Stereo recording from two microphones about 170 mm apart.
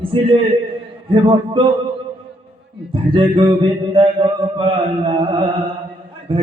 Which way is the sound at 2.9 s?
30° right (ahead or behind).